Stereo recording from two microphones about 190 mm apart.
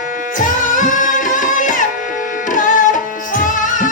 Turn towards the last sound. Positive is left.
turn(degrees=45)  # may be behind; listen again after turning